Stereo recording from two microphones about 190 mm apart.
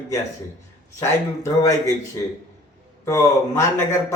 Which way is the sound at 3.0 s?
15° left (ahead or behind).